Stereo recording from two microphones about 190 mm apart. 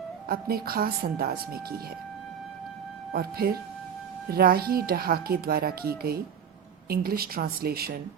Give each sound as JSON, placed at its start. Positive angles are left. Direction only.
{"t": 0.3, "sound": "speech", "side_deg": -55}
{"t": 3.1, "sound": "speech", "side_deg": -55}